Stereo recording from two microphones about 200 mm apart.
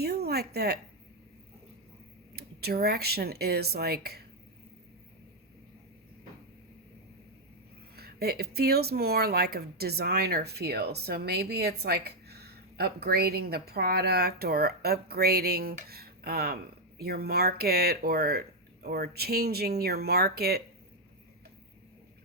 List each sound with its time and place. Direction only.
0.0 s a sound: 50° right (ahead or behind)
2.3 s speech: 50° right (ahead or behind)
7.9 s speech: 50° right (ahead or behind)